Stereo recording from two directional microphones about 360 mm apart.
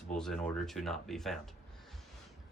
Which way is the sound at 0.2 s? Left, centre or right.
Centre.